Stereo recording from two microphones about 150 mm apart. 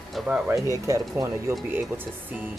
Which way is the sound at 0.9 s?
20° right (ahead or behind).